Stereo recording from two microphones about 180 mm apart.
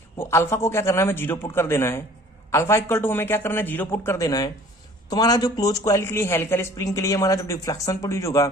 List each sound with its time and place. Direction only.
0.2 s a woman's voice: 15° left (ahead or behind)